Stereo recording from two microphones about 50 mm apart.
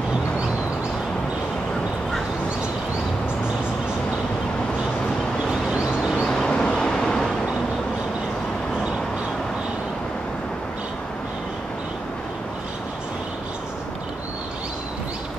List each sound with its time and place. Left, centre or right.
5.5 s vehicle: centre
6.2 s vehicle: centre